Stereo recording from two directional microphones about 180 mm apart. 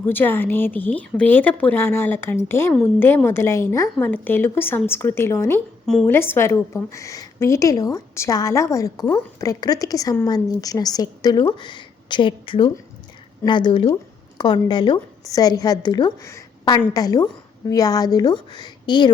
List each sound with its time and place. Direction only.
0.0 s a woman's voice: 10° left (ahead or behind)
5.8 s a woman's voice: 5° left (ahead or behind); by 19.1 s 25° left (ahead or behind)